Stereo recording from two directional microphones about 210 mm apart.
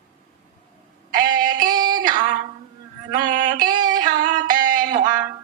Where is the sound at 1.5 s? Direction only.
20° right (ahead or behind).